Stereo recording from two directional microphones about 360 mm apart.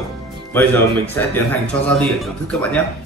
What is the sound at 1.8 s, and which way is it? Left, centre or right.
Speech, centre.